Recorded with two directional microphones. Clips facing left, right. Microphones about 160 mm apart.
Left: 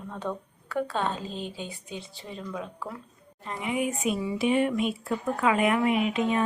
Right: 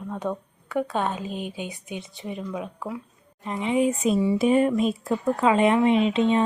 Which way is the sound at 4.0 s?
30° right (ahead or behind).